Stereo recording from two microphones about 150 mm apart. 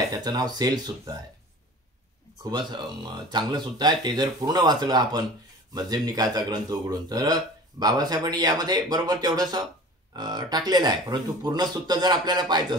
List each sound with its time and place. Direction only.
0.1 s speech: 25° right (ahead or behind)
2.4 s speech: 30° right (ahead or behind)